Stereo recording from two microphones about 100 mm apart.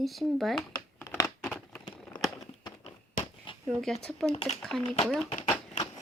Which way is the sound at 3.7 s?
5° left (ahead or behind).